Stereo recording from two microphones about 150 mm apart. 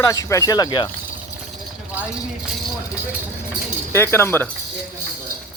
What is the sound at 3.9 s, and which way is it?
Speech, 15° left (ahead or behind).